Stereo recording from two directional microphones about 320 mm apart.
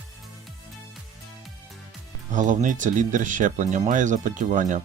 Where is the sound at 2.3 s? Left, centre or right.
Right.